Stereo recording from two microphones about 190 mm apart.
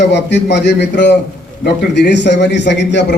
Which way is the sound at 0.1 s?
65° left (ahead or behind).